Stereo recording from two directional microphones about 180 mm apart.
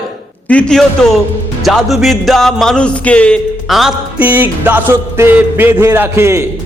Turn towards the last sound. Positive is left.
turn(degrees=-15)  # may be behind; listen again after turning